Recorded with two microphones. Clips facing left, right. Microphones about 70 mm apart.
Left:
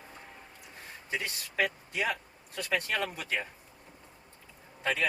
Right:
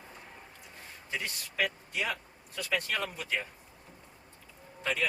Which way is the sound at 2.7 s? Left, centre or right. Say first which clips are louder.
Left 2 dB; left.